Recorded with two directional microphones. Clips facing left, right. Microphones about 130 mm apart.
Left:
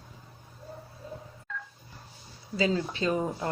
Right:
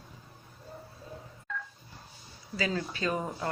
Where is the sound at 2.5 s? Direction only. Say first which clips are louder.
Left 5 dB; 25° left (ahead or behind).